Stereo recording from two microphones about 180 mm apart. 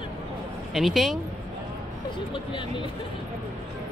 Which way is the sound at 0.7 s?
Centre (ahead or behind).